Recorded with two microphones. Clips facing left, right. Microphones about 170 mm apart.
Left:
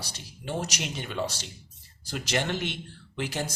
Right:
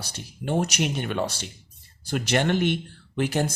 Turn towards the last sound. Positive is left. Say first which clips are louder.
# right 7 dB
turn(degrees=-55)  # may be behind; listen again after turning